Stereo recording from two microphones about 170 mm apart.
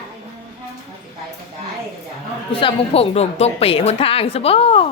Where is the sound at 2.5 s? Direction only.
35° left (ahead or behind).